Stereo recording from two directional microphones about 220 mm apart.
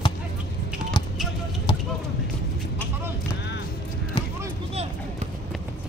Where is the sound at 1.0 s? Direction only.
20° left (ahead or behind).